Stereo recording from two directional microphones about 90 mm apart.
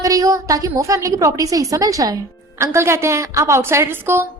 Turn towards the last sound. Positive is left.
turn(degrees=-25)  # may be behind; listen again after turning